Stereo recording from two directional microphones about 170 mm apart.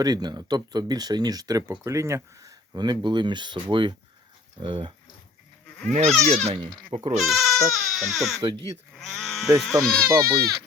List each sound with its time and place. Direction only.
0.0 s speech: 25° right (ahead or behind)
5.9 s speech: 40° right (ahead or behind)
6.6 s speech: 30° right (ahead or behind)
7.2 s speech: centre (ahead or behind)
10.1 s speech: 15° right (ahead or behind)